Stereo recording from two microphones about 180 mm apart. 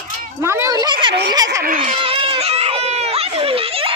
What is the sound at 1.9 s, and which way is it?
Baby cry, 30° right (ahead or behind).